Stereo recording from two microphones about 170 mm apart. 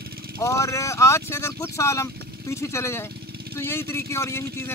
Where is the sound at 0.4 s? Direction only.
20° left (ahead or behind).